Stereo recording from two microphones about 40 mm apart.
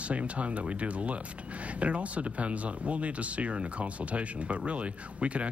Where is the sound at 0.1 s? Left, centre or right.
Right.